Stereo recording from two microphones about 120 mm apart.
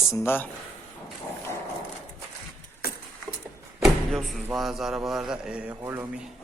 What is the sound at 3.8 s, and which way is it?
Speech, centre (ahead or behind).